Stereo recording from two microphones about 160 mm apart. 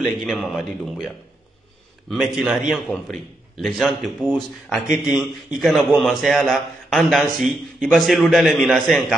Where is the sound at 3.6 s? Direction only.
Centre (ahead or behind).